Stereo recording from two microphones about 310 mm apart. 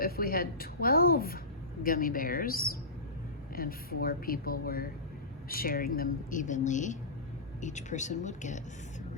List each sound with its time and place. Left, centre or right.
0.0 s speech: left